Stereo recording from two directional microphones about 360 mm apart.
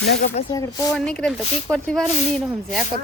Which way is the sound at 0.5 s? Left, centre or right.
Centre.